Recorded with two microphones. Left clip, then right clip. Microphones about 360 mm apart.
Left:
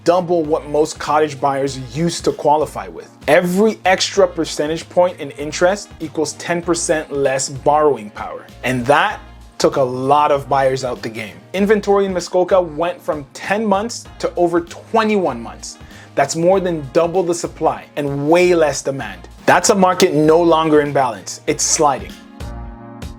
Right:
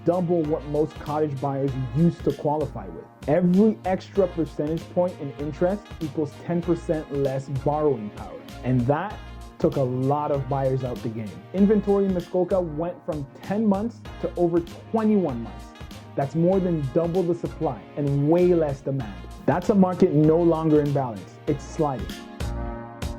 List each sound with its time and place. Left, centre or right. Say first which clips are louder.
0.2 s speech: left 8 dB; centre
2.4 s speech: left 12 dB; centre
3.2 s speech: left 8 dB; centre
11.9 s speech: left 8 dB; centre